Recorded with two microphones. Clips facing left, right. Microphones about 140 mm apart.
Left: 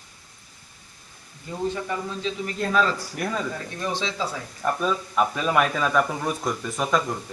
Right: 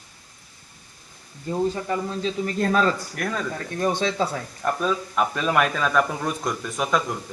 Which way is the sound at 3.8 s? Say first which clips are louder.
Right 6 dB; 50° right (ahead or behind).